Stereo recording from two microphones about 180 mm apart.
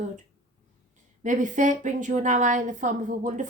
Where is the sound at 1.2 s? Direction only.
45° right (ahead or behind).